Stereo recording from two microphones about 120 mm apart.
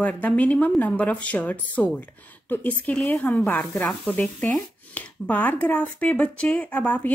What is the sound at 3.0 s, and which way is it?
Speech, centre (ahead or behind).